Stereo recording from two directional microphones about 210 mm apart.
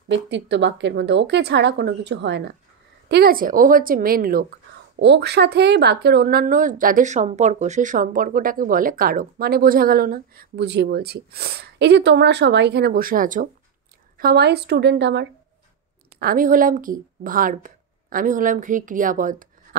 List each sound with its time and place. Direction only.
0.1 s a woman's voice: 60° right (ahead or behind)
4.9 s a woman's voice: 55° right (ahead or behind)
16.2 s a woman's voice: 45° right (ahead or behind)